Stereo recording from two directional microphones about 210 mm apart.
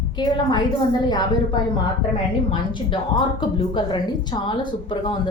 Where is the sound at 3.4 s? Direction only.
20° left (ahead or behind).